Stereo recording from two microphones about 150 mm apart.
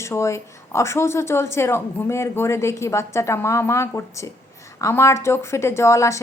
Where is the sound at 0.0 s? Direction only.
20° left (ahead or behind).